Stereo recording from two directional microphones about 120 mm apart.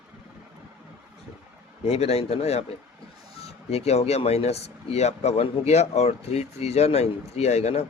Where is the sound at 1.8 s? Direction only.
60° left (ahead or behind).